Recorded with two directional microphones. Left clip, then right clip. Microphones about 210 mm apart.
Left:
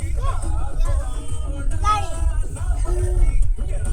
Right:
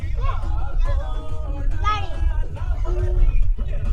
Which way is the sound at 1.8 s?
55° left (ahead or behind).